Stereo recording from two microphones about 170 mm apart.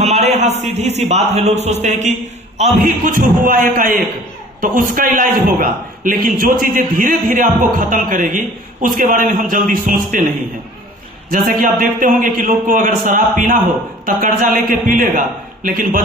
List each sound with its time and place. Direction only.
0.0 s a man's voice: 40° right (ahead or behind)
11.2 s a man's voice: 60° right (ahead or behind)